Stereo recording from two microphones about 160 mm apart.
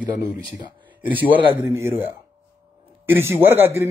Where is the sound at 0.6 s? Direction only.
30° right (ahead or behind).